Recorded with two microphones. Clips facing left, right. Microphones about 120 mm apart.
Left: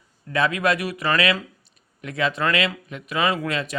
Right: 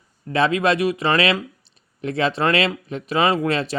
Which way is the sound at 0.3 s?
30° right (ahead or behind).